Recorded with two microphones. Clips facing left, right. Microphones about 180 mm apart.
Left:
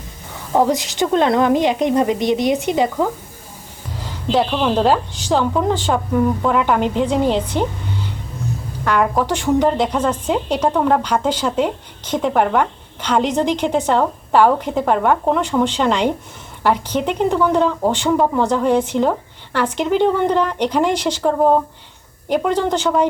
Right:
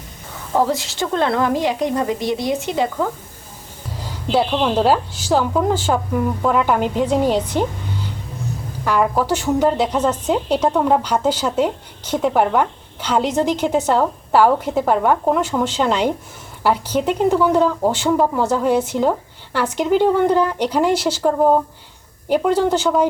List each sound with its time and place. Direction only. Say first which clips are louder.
0.5 s a woman's voice: left 2 dB; 15° left (ahead or behind)
3.9 s speech: left 1 dB; 10° right (ahead or behind)
8.8 s speech: even; 5° right (ahead or behind)